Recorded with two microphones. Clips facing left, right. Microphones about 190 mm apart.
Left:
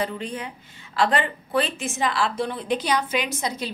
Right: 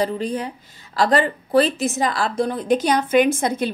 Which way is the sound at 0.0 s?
40° right (ahead or behind).